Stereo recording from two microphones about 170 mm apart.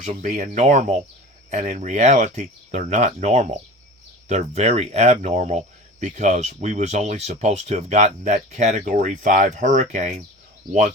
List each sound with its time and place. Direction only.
0.0 s speech: 45° right (ahead or behind)